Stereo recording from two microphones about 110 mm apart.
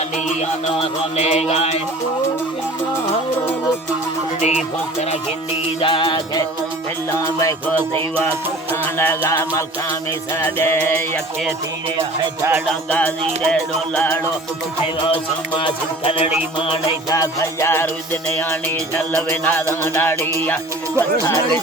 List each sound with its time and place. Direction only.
0.3 s music: 85° left
4.4 s music: 90° left
5.8 s music: 50° left (ahead or behind)
7.1 s music: 30° left (ahead or behind)
8.7 s music: 20° left (ahead or behind)
11.9 s music: 25° right (ahead or behind)
12.9 s music: 10° left (ahead or behind)
15.0 s music: 50° left (ahead or behind)
17.1 s music: 30° left (ahead or behind)